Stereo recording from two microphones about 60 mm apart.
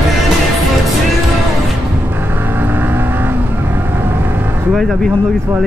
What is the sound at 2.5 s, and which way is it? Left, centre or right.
Vehicle, right.